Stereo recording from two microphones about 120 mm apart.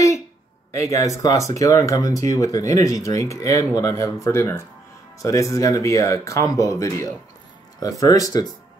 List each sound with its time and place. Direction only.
0.9 s speech: 25° left (ahead or behind)